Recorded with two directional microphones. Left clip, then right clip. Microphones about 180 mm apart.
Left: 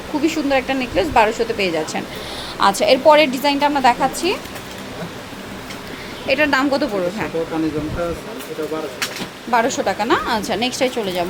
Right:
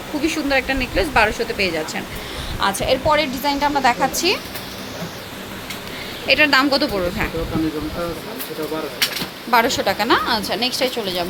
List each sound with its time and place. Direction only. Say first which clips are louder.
0.3 s a woman's voice: left 1 dB; 10° left (ahead or behind)
6.2 s a woman's voice: right 2 dB; 10° left (ahead or behind)
9.5 s a woman's voice: right 1 dB; 5° left (ahead or behind)